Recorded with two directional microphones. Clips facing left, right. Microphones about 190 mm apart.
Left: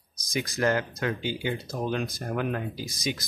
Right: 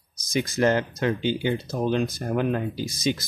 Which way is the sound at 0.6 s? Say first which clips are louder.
Right 4 dB; 25° right (ahead or behind).